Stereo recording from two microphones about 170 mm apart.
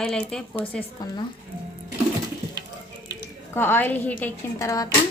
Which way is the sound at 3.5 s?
15° left (ahead or behind).